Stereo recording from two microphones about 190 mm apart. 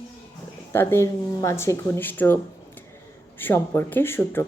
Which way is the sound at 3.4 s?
10° left (ahead or behind).